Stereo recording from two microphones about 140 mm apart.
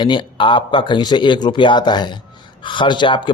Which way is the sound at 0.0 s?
35° left (ahead or behind).